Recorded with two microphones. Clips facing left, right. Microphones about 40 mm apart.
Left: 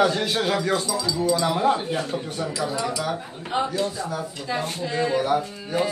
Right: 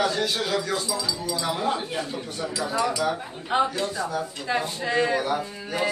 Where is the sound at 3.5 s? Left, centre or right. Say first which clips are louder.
Right 1 dB; centre.